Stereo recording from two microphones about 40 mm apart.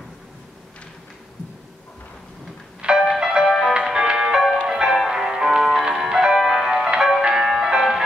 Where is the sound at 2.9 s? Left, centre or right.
Centre.